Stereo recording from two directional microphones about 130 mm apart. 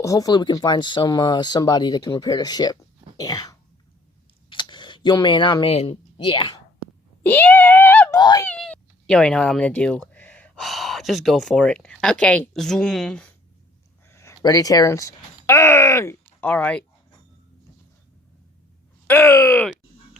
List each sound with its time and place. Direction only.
0.0 s speech: 25° left (ahead or behind)
3.2 s cough: 30° left (ahead or behind)
4.4 s a sound: 40° left (ahead or behind)
5.7 s speech: 50° left (ahead or behind)
6.1 s speech: 35° left (ahead or behind)
7.2 s speech: 15° left (ahead or behind)
8.1 s speech: 30° left (ahead or behind)
8.4 s speech: 5° left (ahead or behind)
14.1 s speech: 20° left (ahead or behind)
19.0 s speech: 20° left (ahead or behind)